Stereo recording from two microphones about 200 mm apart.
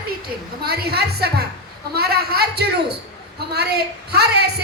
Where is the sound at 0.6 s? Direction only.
50° right (ahead or behind).